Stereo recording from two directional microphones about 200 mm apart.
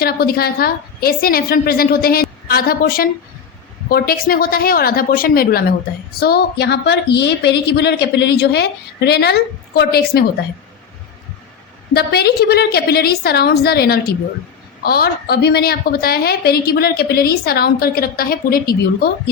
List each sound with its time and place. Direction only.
0.0 s a woman's voice: 50° left (ahead or behind)
11.9 s a woman's voice: 50° left (ahead or behind)